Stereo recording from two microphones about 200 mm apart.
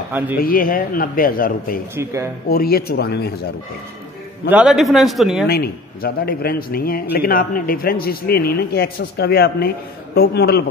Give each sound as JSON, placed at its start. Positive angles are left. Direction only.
{"t": 0.4, "sound": "a man's voice", "side_deg": 45}
{"t": 4.5, "sound": "a man's voice", "side_deg": -5}
{"t": 5.5, "sound": "a man's voice", "side_deg": 50}